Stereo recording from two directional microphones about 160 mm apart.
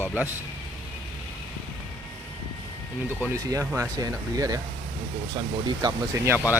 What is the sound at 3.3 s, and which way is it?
Speech, 20° right (ahead or behind).